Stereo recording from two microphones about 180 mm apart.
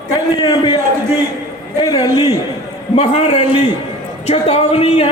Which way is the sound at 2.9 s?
35° left (ahead or behind).